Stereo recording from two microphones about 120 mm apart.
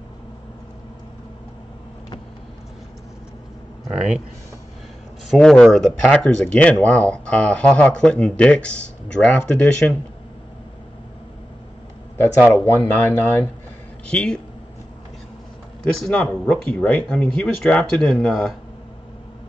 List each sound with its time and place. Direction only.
5.3 s speech: 5° left (ahead or behind)
12.2 s speech: 15° left (ahead or behind)
15.8 s speech: 10° left (ahead or behind)